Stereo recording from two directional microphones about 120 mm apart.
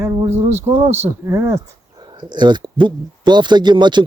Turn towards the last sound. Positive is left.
turn(degrees=-40)  # may be behind; listen again after turning